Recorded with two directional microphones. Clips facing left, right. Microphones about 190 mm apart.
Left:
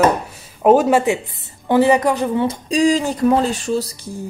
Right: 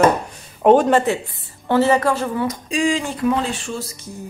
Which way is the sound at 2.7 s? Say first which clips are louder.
Left 6 dB; 40° left (ahead or behind).